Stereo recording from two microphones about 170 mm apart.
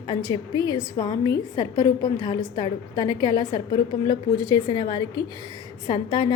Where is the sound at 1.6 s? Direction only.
25° right (ahead or behind).